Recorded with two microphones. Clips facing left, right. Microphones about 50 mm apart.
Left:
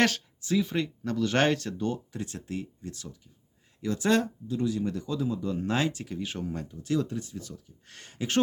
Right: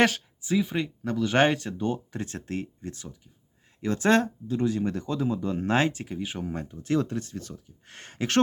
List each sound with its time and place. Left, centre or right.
0.0 s speech: centre
2.1 s speech: right
6.1 s speech: centre
6.5 s speech: right
7.5 s speech: right
8.1 s a sound: right